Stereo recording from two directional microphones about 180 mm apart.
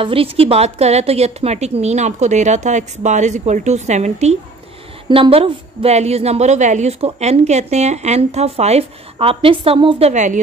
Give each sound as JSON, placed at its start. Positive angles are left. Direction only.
{"t": 0.0, "sound": "a woman's voice", "side_deg": -30}